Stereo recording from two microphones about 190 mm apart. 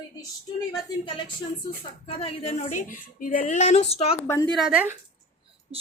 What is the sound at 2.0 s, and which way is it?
A woman's voice, 30° left (ahead or behind).